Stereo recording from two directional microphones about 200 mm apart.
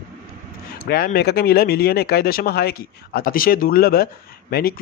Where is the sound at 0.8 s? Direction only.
50° left (ahead or behind).